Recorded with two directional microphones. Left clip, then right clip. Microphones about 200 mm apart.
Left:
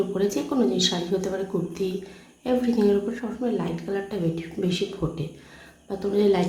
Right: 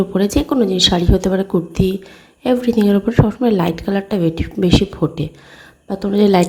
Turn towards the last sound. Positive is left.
turn(degrees=-40)  # may be behind; listen again after turning